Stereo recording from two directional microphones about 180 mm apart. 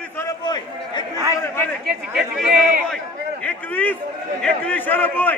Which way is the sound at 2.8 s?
5° left (ahead or behind).